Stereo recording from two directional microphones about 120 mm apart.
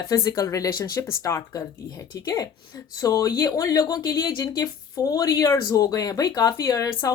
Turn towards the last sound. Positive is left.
turn(degrees=30)  # may be behind; listen again after turning